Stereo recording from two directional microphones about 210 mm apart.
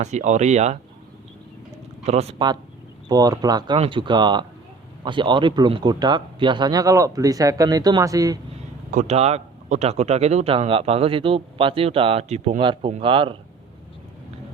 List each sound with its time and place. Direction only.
0.0 s speech: 35° right (ahead or behind)
2.0 s speech: 30° right (ahead or behind)
8.9 s speech: 35° right (ahead or behind)